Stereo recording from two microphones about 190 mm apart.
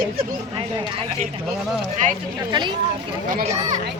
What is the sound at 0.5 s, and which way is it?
Speech, 25° right (ahead or behind).